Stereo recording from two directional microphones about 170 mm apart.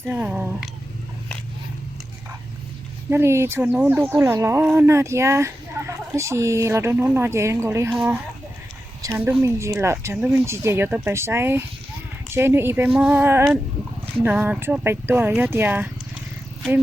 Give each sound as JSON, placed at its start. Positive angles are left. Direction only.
{"t": 0.0, "sound": "speech", "side_deg": -10}
{"t": 3.1, "sound": "speech", "side_deg": -15}
{"t": 7.9, "sound": "speech", "side_deg": -5}
{"t": 9.0, "sound": "speech", "side_deg": -15}